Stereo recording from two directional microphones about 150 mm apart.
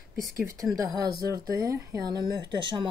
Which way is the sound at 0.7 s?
25° right (ahead or behind).